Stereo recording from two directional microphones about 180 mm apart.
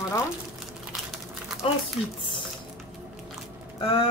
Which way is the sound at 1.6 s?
30° left (ahead or behind).